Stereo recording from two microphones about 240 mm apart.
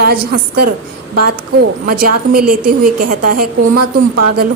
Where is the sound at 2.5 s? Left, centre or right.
Right.